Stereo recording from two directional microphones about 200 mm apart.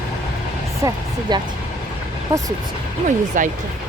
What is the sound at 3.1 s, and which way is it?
Speech, 40° right (ahead or behind).